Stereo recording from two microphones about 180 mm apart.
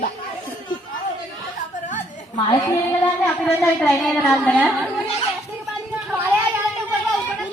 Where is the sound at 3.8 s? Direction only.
Centre (ahead or behind).